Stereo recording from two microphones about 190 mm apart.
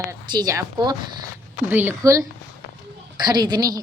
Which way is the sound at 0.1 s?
20° right (ahead or behind).